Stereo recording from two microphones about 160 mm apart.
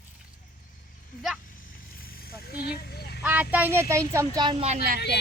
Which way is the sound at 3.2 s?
10° right (ahead or behind).